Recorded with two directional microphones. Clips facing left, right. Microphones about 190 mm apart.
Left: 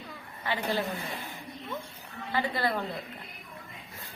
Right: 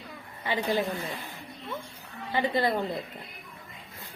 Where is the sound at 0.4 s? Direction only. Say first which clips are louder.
Right 3 dB; 15° right (ahead or behind).